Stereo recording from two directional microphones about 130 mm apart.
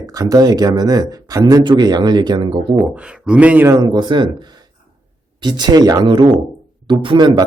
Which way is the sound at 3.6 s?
30° right (ahead or behind).